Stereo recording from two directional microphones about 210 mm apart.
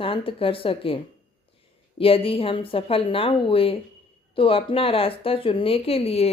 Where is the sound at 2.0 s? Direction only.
25° left (ahead or behind).